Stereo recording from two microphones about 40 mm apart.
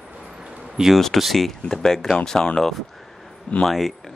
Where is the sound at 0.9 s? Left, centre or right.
Centre.